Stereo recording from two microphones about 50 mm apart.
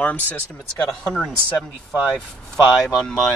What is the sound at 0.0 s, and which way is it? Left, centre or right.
Speech, left.